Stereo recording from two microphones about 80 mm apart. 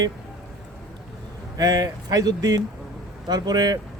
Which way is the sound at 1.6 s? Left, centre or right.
Right.